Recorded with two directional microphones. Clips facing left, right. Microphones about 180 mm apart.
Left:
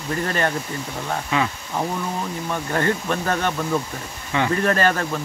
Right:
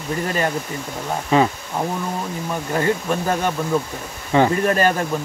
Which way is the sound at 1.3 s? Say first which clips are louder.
Right 7 dB; 35° right (ahead or behind).